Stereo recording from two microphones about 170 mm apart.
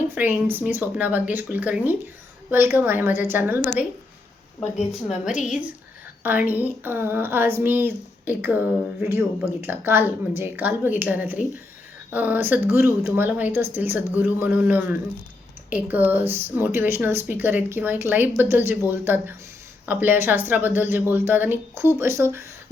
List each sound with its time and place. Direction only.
0.1 s speech: 10° right (ahead or behind)
5.0 s a woman's voice: 5° right (ahead or behind)